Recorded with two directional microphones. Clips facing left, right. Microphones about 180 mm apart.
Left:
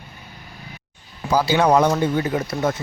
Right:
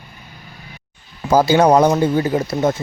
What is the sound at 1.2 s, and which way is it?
Speech, 45° right (ahead or behind).